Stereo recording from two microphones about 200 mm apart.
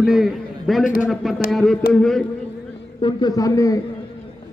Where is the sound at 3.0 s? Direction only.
25° left (ahead or behind).